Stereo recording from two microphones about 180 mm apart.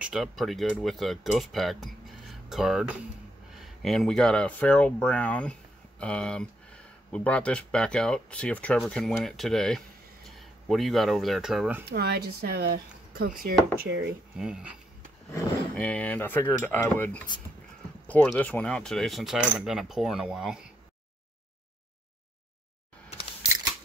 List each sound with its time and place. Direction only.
0.0 s speech: centre (ahead or behind)
11.9 s speech: 60° right (ahead or behind)
13.8 s speech: 75° right (ahead or behind)
14.3 s speech: 5° right (ahead or behind)
15.7 s speech: 10° left (ahead or behind)